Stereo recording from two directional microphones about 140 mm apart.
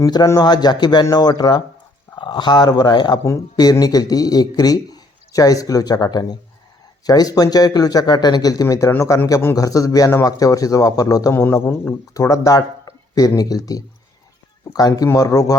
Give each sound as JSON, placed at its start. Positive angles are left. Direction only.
{"t": 0.0, "sound": "speech", "side_deg": 25}